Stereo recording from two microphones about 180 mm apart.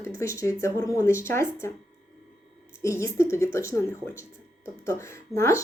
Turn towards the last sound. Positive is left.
turn(degrees=15)  # may be behind; listen again after turning